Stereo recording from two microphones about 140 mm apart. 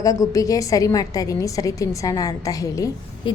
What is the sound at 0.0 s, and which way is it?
A woman's voice, 25° left (ahead or behind).